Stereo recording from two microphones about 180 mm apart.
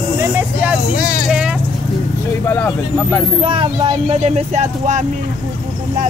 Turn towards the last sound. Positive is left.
turn(degrees=-40)  # may be behind; listen again after turning